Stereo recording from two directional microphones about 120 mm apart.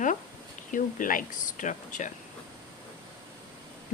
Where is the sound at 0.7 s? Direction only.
90° left.